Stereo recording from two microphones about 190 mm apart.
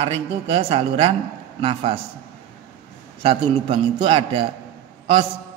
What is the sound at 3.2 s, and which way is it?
Speech, 30° right (ahead or behind).